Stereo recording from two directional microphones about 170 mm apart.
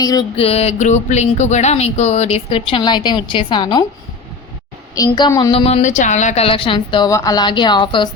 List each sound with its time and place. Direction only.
0.0 s a woman's voice: 20° left (ahead or behind)
0.3 s speech: 35° left (ahead or behind)
4.9 s a woman's voice: 25° left (ahead or behind)